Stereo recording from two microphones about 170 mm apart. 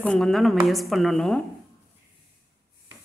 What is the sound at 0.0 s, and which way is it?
A woman's voice, 5° left (ahead or behind).